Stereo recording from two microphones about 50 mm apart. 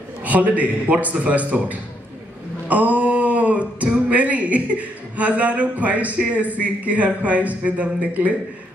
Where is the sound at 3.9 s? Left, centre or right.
Right.